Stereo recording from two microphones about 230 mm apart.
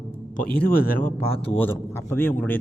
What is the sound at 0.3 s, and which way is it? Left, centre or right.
Speech, left.